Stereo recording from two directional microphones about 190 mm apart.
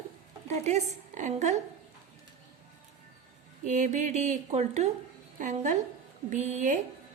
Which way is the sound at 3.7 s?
40° right (ahead or behind).